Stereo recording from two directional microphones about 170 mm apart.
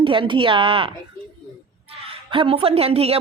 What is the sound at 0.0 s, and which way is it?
Speech, 30° right (ahead or behind).